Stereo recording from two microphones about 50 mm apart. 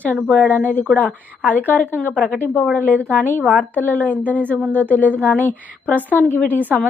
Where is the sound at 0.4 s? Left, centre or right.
Left.